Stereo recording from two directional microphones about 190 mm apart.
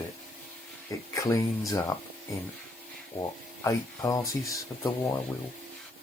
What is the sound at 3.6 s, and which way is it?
Speech, 20° left (ahead or behind).